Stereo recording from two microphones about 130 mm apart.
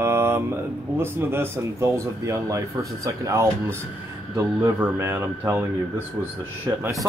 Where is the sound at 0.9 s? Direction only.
15° right (ahead or behind).